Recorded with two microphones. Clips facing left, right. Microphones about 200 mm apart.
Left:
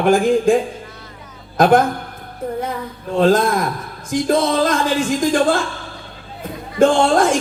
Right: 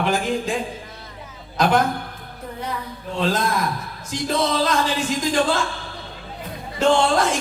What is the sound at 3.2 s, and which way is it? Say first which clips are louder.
Speech: left 8 dB; 50° left (ahead or behind).